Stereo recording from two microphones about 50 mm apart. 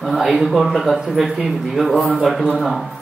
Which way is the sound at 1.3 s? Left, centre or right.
Centre.